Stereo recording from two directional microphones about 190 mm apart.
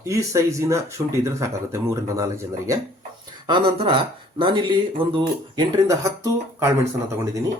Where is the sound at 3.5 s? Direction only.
25° right (ahead or behind).